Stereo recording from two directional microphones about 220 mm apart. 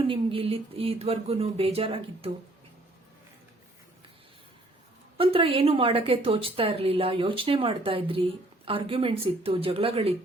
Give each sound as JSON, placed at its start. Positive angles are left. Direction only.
{"t": 0.1, "sound": "a woman's voice", "side_deg": -25}
{"t": 5.1, "sound": "a woman's voice", "side_deg": -25}